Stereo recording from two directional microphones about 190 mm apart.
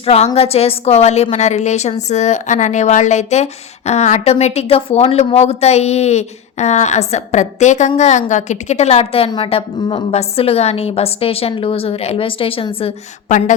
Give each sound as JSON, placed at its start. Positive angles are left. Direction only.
{"t": 0.0, "sound": "a woman's voice", "side_deg": 35}